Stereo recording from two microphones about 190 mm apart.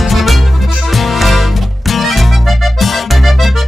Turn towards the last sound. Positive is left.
turn(degrees=0)  # may be behind; listen again after turning